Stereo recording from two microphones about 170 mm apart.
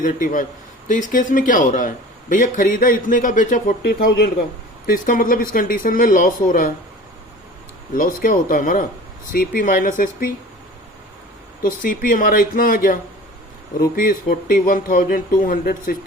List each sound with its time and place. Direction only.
0.0 s speech: 50° left (ahead or behind)
3.8 s speech: 70° left (ahead or behind)
4.9 s speech: 55° left (ahead or behind)
8.2 s speech: 55° left (ahead or behind)
11.6 s speech: 55° left (ahead or behind)